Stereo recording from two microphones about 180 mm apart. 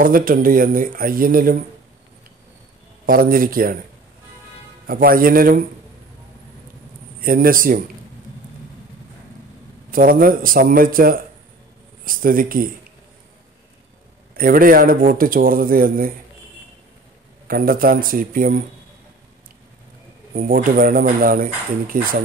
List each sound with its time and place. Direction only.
0.0 s speech: 50° right (ahead or behind)
3.1 s speech: 50° right (ahead or behind)
4.8 s speech: 55° right (ahead or behind)
7.2 s speech: 55° right (ahead or behind)
9.8 s speech: 50° right (ahead or behind)
14.3 s speech: 55° right (ahead or behind)
17.5 s speech: 55° right (ahead or behind)
20.3 s speech: 50° right (ahead or behind)